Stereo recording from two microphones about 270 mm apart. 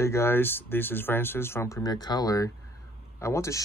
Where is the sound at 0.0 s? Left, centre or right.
Centre.